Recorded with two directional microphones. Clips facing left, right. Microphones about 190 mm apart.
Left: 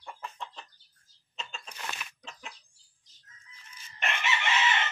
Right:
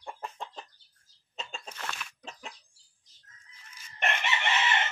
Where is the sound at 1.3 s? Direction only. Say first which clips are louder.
Right 2 dB; 45° right (ahead or behind).